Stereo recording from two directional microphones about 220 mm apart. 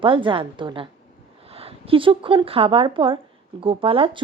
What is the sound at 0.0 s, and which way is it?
A woman's voice, 20° right (ahead or behind).